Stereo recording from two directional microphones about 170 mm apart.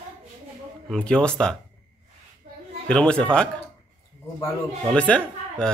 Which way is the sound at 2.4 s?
40° right (ahead or behind).